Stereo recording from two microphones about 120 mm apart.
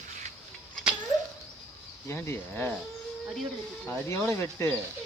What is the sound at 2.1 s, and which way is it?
Speech, 20° left (ahead or behind).